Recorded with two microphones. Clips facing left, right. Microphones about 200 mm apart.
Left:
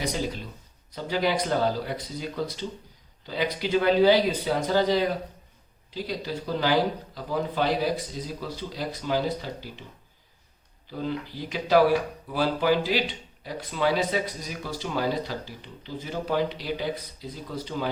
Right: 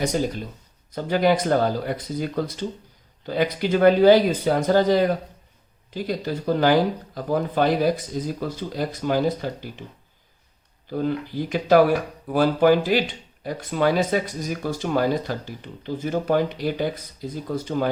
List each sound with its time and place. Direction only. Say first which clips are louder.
0.0 s speech: right 6 dB; 45° right (ahead or behind)
10.8 s speech: right 6 dB; 50° right (ahead or behind)